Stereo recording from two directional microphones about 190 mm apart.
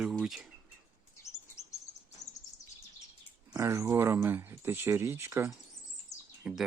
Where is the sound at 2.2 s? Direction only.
15° left (ahead or behind).